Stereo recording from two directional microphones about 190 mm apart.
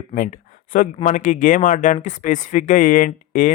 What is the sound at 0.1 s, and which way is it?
Speech, 45° left (ahead or behind).